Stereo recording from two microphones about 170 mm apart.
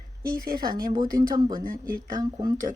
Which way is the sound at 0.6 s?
60° right (ahead or behind).